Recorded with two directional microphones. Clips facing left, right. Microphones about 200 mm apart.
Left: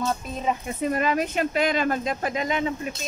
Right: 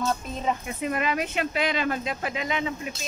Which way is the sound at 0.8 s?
40° left (ahead or behind).